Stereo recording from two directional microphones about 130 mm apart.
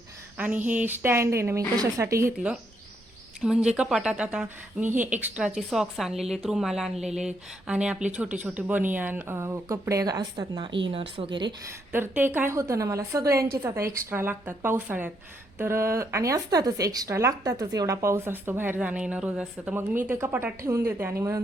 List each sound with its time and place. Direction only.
0.3 s a woman's voice: 10° right (ahead or behind)
2.3 s a woman's voice: 10° right (ahead or behind); by 11.4 s 40° right (ahead or behind)
11.9 s a woman's voice: 15° right (ahead or behind)